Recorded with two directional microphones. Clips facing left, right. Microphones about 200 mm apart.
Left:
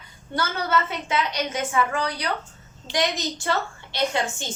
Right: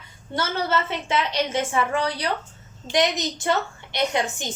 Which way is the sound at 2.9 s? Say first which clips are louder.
Right 3 dB; 20° right (ahead or behind).